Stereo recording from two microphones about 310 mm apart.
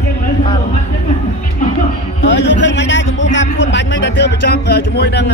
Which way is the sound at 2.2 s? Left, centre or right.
Left.